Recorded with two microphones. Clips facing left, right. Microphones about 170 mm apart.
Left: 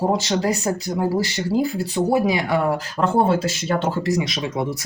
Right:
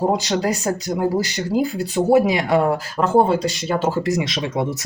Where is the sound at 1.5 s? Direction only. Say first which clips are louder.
Even; 20° right (ahead or behind).